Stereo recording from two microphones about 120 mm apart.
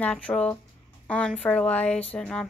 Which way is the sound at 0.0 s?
10° left (ahead or behind).